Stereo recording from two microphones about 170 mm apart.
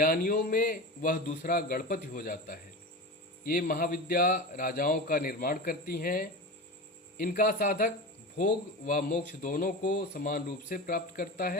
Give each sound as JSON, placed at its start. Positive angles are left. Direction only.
{"t": 0.0, "sound": "a man's voice", "side_deg": 55}